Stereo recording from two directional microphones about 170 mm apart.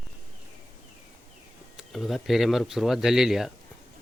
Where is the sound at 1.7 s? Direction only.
Centre (ahead or behind).